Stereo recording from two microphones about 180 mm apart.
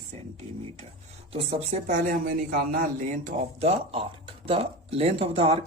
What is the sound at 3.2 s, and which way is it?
Speech, 40° right (ahead or behind).